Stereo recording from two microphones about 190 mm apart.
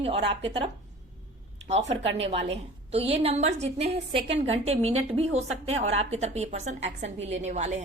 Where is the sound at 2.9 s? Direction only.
30° right (ahead or behind).